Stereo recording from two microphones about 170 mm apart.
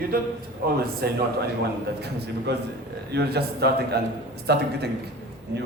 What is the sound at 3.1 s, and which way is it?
A man's voice, 70° right (ahead or behind).